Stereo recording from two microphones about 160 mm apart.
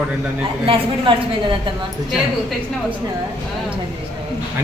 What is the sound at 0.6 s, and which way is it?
Speech, 30° right (ahead or behind).